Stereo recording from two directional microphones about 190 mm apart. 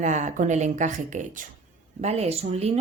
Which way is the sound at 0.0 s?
40° right (ahead or behind).